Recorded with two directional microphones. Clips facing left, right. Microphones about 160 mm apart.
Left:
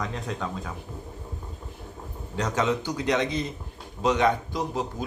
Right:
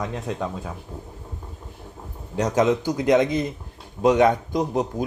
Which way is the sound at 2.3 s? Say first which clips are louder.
Right 6 dB; 15° right (ahead or behind).